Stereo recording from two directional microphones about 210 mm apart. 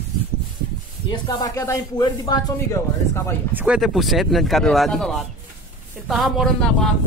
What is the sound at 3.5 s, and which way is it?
Speech, 5° right (ahead or behind).